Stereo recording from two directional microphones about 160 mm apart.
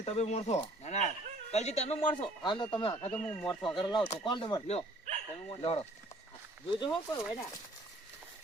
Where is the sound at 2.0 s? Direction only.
30° left (ahead or behind).